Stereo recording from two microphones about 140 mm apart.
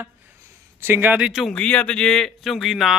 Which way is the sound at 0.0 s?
15° right (ahead or behind).